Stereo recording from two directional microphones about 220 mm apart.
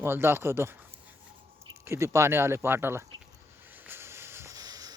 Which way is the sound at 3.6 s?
10° right (ahead or behind).